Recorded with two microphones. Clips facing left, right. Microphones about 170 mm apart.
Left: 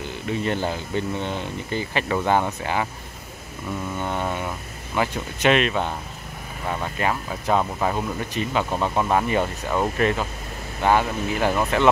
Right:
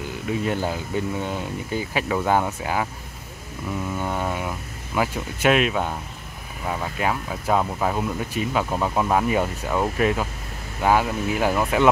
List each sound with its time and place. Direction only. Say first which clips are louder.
0.3 s speech: even; 5° right (ahead or behind)
3.9 s speech: even; 5° right (ahead or behind)